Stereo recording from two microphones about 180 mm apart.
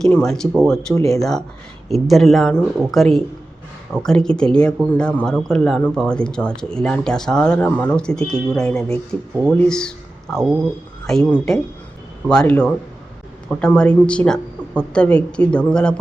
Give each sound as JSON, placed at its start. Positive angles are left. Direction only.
{"t": 0.0, "sound": "speech", "side_deg": 5}